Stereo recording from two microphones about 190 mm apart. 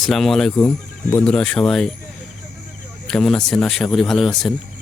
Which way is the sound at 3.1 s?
5° left (ahead or behind).